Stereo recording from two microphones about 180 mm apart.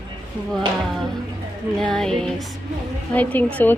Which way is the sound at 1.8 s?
5° left (ahead or behind).